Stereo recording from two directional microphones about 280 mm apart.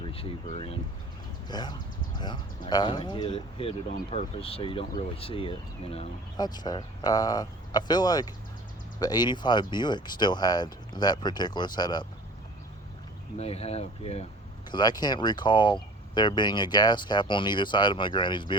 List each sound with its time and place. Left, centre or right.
0.0 s speech: centre
13.4 s speech: left